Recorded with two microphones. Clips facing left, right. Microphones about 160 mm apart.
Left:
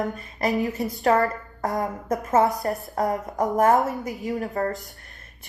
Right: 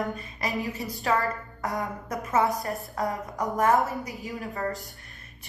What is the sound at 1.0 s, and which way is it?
A woman's voice, 45° left (ahead or behind).